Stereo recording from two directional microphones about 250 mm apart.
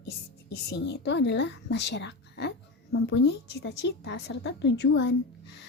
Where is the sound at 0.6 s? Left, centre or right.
Left.